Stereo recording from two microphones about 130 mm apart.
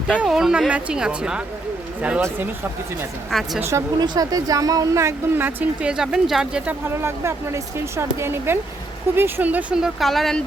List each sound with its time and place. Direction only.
0.1 s speech: 5° right (ahead or behind)
3.2 s speech: centre (ahead or behind)
3.6 s speech: 20° right (ahead or behind)
3.9 s speech: 35° right (ahead or behind); by 10.4 s centre (ahead or behind)